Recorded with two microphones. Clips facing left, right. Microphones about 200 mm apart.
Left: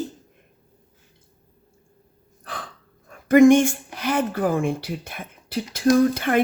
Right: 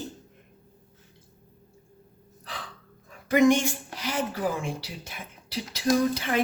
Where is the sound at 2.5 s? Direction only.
50° left (ahead or behind).